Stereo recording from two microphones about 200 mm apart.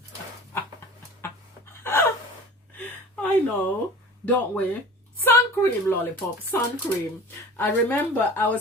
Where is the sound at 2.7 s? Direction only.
10° left (ahead or behind).